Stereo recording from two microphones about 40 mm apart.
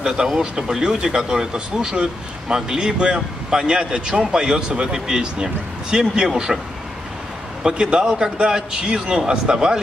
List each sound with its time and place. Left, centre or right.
0.0 s speech: centre
7.6 s speech: right